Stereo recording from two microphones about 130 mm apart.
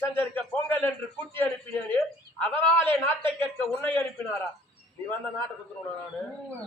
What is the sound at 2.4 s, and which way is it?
A man's voice, 20° left (ahead or behind).